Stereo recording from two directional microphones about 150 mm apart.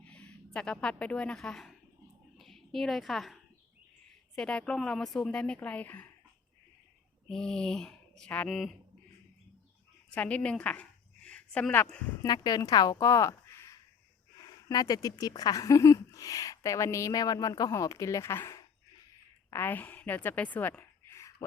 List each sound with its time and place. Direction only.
0.0 s a woman's voice: 10° left (ahead or behind)
7.3 s speech: 5° left (ahead or behind)
10.2 s speech: 10° left (ahead or behind)
12.2 s a woman's voice: 25° left (ahead or behind)